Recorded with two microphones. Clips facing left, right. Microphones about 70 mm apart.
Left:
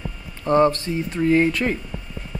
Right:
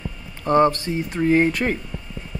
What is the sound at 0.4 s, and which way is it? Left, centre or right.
Speech, right.